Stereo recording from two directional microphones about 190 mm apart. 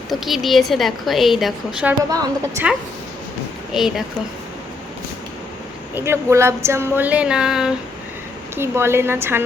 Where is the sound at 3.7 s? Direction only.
Centre (ahead or behind).